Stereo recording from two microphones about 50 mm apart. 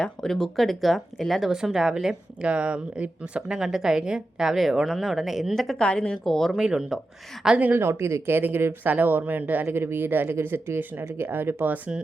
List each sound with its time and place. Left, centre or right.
0.0 s speech: centre
2.4 s speech: right
3.6 s a woman's voice: centre
5.8 s speech: centre
6.2 s speech: centre
6.6 s a woman's voice: centre
7.8 s speech: right
8.3 s speech: right
9.6 s speech: right